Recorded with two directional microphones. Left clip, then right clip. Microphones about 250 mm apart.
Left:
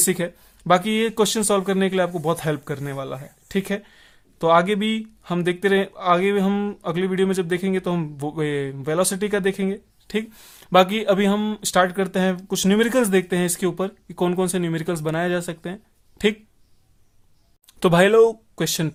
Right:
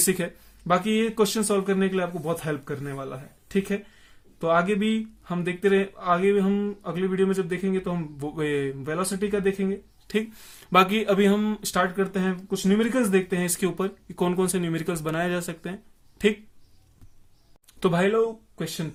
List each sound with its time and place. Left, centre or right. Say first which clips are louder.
0.0 s speech: left 3 dB; left
17.7 s speech: left 7 dB; left